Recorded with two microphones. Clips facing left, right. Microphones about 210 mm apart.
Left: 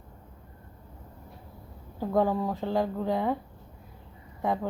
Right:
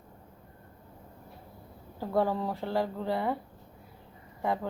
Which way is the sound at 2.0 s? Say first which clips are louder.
Left 3 dB; 15° left (ahead or behind).